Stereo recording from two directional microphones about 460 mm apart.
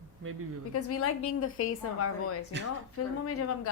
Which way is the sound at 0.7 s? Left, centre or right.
Left.